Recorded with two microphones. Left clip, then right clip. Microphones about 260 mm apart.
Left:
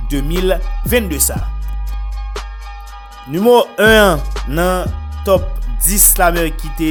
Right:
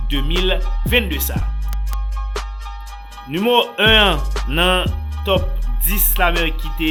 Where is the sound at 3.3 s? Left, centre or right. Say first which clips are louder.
Left 5 dB; left.